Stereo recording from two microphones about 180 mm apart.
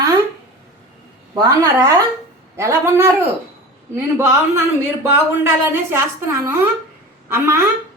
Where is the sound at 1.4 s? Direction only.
20° right (ahead or behind).